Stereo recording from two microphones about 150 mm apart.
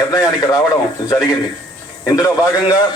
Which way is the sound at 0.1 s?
25° left (ahead or behind).